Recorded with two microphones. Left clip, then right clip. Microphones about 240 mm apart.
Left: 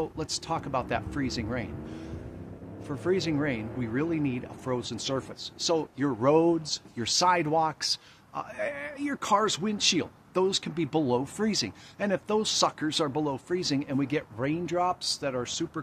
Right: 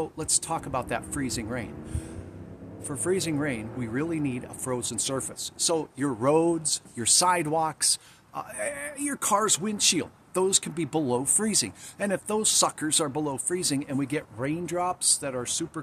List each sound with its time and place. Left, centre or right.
0.0 s speech: centre